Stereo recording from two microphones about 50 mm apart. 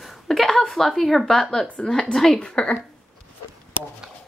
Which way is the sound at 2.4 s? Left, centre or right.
Centre.